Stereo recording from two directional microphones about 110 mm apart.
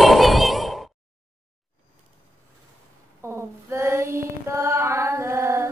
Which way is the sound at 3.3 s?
25° right (ahead or behind).